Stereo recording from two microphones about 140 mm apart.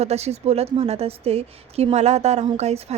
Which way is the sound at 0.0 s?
50° right (ahead or behind).